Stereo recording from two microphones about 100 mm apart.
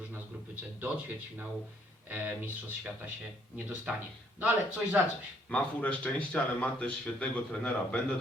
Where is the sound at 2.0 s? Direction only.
20° right (ahead or behind).